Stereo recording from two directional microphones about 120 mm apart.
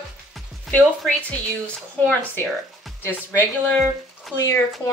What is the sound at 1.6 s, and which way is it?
A woman's voice, 10° left (ahead or behind).